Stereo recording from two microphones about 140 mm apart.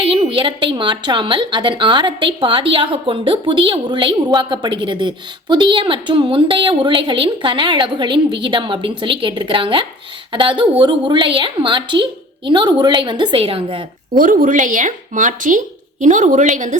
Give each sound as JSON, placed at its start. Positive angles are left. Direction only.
{"t": 0.0, "sound": "a woman's voice", "side_deg": -40}
{"t": 14.1, "sound": "speech", "side_deg": -75}